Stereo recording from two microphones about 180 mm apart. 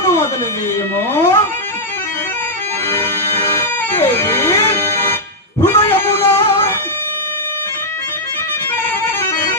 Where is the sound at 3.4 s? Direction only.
15° left (ahead or behind).